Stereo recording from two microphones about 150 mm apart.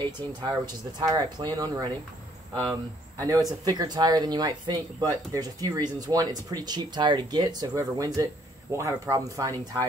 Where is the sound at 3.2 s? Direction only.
25° right (ahead or behind).